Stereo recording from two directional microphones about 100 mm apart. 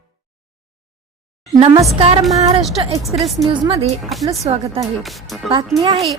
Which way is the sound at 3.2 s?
70° right (ahead or behind).